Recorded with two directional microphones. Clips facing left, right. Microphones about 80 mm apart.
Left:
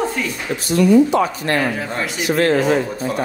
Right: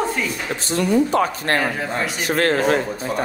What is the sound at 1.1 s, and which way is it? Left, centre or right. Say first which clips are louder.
Speech: left 1 dB; right.